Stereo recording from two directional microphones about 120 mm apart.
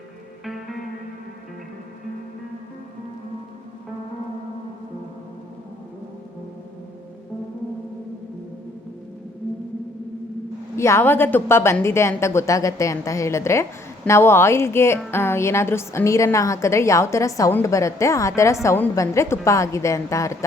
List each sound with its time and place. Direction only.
0.4 s music: centre (ahead or behind)
10.8 s a woman's voice: 20° left (ahead or behind)